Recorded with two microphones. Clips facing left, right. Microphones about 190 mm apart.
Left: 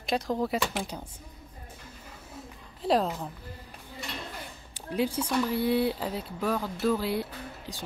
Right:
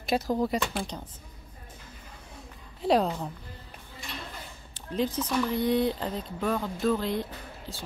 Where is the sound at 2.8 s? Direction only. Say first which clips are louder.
Right 2 dB; centre (ahead or behind).